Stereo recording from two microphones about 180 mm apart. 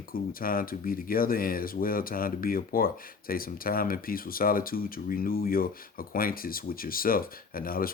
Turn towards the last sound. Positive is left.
turn(degrees=55)  # may be behind; listen again after turning